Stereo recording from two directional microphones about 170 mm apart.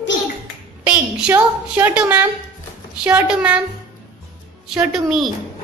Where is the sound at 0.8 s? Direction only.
10° right (ahead or behind).